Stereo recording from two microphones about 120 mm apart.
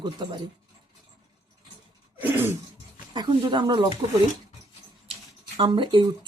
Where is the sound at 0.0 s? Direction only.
40° right (ahead or behind).